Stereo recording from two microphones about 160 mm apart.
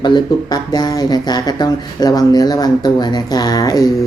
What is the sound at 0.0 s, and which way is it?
Speech, 25° left (ahead or behind).